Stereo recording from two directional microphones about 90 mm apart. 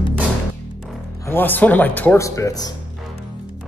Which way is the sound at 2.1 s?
35° left (ahead or behind).